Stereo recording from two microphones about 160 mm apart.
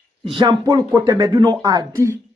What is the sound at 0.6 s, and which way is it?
Speech, 25° right (ahead or behind).